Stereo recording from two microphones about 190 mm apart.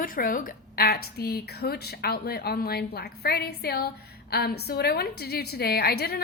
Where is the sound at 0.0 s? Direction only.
50° left (ahead or behind).